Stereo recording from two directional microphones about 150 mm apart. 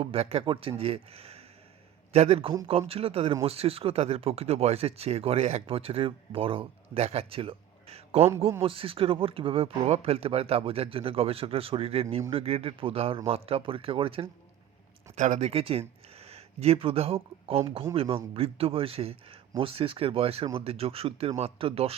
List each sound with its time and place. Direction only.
0.0 s speech: 40° right (ahead or behind)
15.1 s speech: 50° right (ahead or behind)